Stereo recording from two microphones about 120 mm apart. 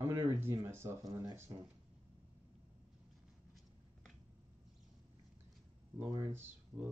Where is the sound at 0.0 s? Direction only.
25° right (ahead or behind).